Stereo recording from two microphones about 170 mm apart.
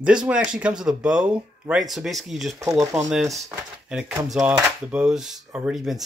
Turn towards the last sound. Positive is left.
turn(degrees=-5)  # may be behind; listen again after turning